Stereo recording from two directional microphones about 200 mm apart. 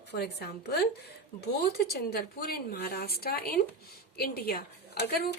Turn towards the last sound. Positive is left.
turn(degrees=50)  # may be behind; listen again after turning